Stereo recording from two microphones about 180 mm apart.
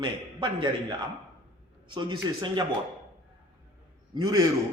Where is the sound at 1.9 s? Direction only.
25° right (ahead or behind).